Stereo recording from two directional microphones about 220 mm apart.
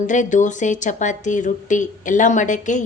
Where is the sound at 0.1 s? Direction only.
35° left (ahead or behind).